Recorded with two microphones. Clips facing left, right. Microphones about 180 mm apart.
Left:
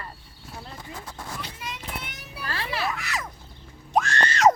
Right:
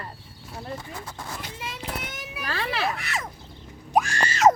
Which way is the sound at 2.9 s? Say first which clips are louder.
Right 1 dB; 30° right (ahead or behind).